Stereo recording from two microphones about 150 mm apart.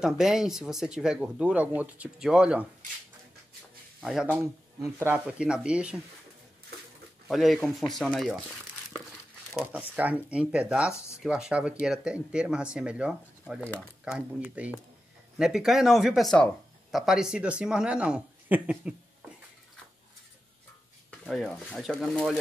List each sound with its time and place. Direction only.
0.0 s speech: 5° right (ahead or behind)
4.0 s speech: 5° right (ahead or behind)
4.4 s speech: 15° right (ahead or behind)
5.2 s speech: 5° right (ahead or behind)
7.2 s speech: centre (ahead or behind)
9.7 s speech: 10° right (ahead or behind)
21.2 s speech: 5° left (ahead or behind)